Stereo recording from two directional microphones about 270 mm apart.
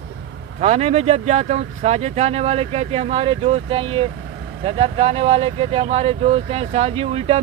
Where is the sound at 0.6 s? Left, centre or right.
Right.